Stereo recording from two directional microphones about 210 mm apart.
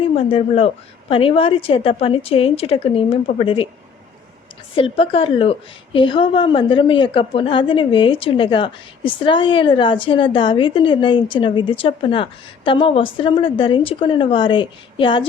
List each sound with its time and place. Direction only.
0.0 s a woman's voice: 25° left (ahead or behind)
4.7 s a woman's voice: 25° left (ahead or behind)